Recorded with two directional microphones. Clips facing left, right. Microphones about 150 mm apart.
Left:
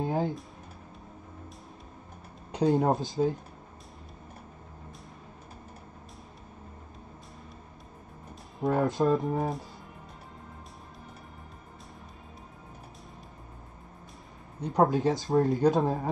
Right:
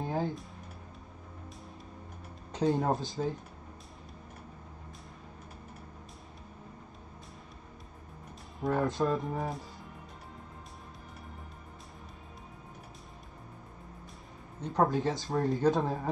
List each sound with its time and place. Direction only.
0.0 s a sound: 20° left (ahead or behind)
2.7 s speech: 20° left (ahead or behind)
8.5 s speech: 20° left (ahead or behind)
14.6 s speech: 15° left (ahead or behind)